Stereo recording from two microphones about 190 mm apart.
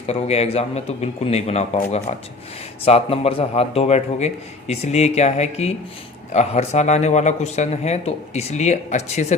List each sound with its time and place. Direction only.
0.1 s a man's voice: 35° left (ahead or behind)